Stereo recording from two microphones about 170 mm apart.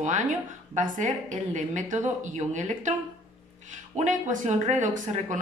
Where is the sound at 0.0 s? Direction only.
45° right (ahead or behind).